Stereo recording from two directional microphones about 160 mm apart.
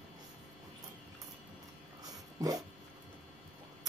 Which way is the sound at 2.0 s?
25° right (ahead or behind).